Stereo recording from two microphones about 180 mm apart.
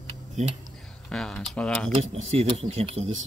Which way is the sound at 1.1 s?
Centre (ahead or behind).